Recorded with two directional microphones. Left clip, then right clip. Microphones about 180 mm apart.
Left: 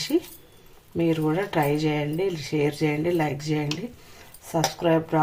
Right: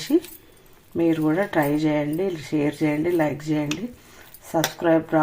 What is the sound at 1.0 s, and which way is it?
Speech, 20° right (ahead or behind).